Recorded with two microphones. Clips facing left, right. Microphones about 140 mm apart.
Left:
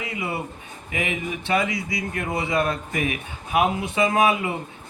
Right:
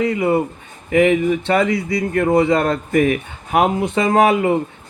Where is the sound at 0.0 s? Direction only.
50° right (ahead or behind).